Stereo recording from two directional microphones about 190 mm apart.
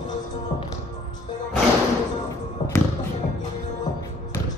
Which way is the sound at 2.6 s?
30° left (ahead or behind).